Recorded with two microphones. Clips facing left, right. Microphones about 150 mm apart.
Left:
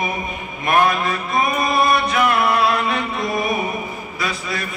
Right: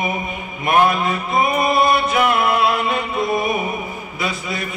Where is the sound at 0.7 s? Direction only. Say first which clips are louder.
Right 1 dB; 25° right (ahead or behind).